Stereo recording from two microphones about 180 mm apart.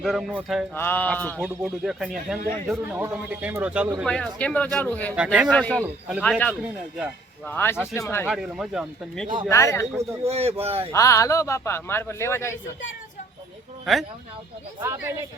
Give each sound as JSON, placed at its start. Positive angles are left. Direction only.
{"t": 0.0, "sound": "speech", "side_deg": 0}
{"t": 0.8, "sound": "a man's voice", "side_deg": 10}
{"t": 1.4, "sound": "a man's voice", "side_deg": -5}
{"t": 4.0, "sound": "a man's voice", "side_deg": 5}
{"t": 5.1, "sound": "a man's voice", "side_deg": -5}
{"t": 5.5, "sound": "a man's voice", "side_deg": 5}
{"t": 8.3, "sound": "speech", "side_deg": 0}
{"t": 9.2, "sound": "speech", "side_deg": -25}
{"t": 9.5, "sound": "a man's voice", "side_deg": 15}
{"t": 10.0, "sound": "speech", "side_deg": -35}
{"t": 10.9, "sound": "a man's voice", "side_deg": 15}
{"t": 13.9, "sound": "speech", "side_deg": 0}
{"t": 14.8, "sound": "a man's voice", "side_deg": -15}